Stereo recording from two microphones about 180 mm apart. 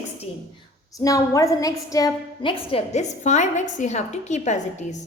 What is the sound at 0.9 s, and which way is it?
A woman's voice, 20° left (ahead or behind).